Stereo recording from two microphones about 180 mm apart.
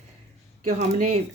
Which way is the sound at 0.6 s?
35° right (ahead or behind).